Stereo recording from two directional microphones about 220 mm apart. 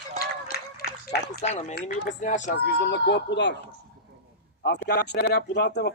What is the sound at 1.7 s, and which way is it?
Speech, 35° left (ahead or behind).